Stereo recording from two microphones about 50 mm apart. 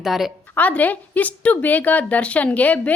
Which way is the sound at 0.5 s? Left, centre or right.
Left.